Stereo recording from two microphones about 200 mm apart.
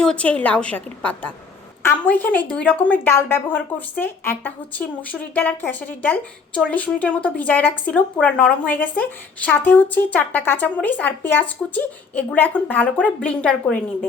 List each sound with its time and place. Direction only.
0.0 s speech: 5° left (ahead or behind)